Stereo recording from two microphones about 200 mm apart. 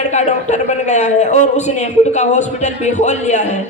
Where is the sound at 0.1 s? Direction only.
35° left (ahead or behind).